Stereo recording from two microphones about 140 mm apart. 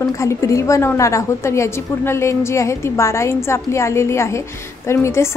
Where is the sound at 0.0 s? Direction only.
20° left (ahead or behind).